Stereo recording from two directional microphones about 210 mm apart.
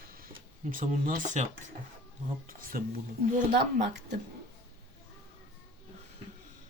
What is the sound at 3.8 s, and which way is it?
Speech, 55° right (ahead or behind).